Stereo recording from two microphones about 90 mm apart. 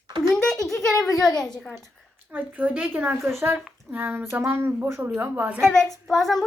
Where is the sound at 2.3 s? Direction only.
20° right (ahead or behind).